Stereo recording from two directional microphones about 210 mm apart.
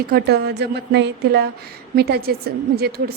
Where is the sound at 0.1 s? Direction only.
50° right (ahead or behind).